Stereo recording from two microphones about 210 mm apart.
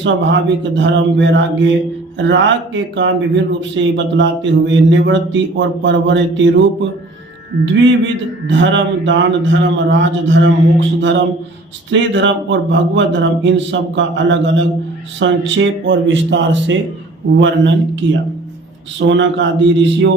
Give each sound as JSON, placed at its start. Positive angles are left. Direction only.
{"t": 0.8, "sound": "a man's voice", "side_deg": -60}
{"t": 7.6, "sound": "a man's voice", "side_deg": -60}